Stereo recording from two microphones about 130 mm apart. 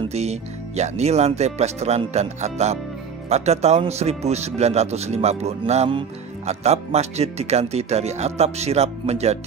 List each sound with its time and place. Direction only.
0.1 s speech: 55° right (ahead or behind)